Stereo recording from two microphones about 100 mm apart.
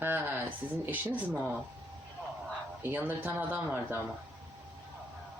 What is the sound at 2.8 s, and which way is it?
Speech, 20° right (ahead or behind).